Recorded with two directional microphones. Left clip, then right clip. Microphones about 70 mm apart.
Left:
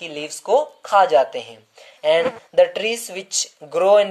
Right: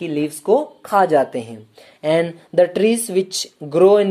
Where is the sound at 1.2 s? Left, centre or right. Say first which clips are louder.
Right 1 dB; right.